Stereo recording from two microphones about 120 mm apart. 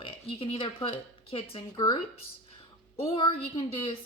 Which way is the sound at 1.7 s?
35° left (ahead or behind).